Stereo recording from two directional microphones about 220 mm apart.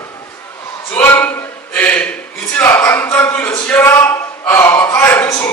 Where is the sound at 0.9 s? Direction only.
10° left (ahead or behind).